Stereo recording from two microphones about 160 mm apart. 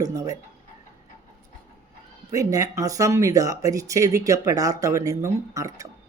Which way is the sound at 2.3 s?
20° right (ahead or behind).